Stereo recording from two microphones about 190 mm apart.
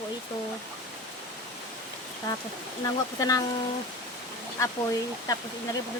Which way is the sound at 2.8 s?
20° left (ahead or behind).